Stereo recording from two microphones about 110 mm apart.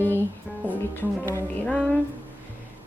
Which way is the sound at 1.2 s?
25° left (ahead or behind).